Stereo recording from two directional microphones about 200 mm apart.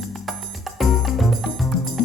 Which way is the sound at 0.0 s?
Centre (ahead or behind).